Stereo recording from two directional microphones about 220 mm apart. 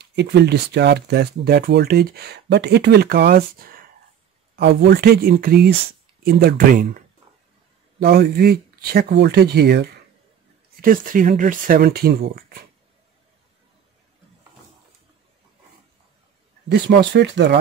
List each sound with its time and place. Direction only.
0.0 s speech: 50° right (ahead or behind)
8.0 s speech: 45° right (ahead or behind)
10.8 s speech: 40° right (ahead or behind)
16.6 s speech: 50° right (ahead or behind)